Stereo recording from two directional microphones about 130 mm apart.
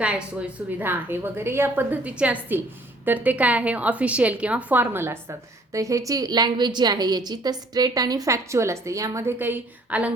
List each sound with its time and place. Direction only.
0.0 s a woman's voice: 10° right (ahead or behind)